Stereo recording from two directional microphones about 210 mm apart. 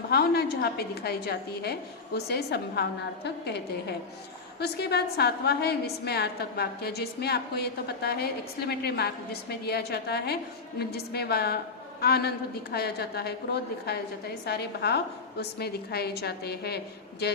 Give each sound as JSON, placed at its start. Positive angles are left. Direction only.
{"t": 0.1, "sound": "a woman's voice", "side_deg": 50}